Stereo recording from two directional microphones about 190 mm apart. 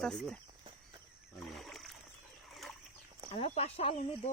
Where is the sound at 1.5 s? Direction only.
Centre (ahead or behind).